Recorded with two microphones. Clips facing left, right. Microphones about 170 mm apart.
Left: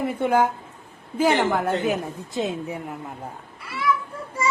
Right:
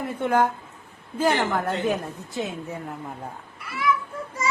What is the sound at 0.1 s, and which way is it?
A woman's voice, 10° left (ahead or behind).